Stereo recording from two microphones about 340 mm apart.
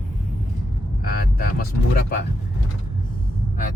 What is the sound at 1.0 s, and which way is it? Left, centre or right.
Speech, left.